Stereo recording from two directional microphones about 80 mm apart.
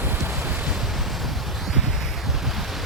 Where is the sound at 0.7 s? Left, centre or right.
Centre.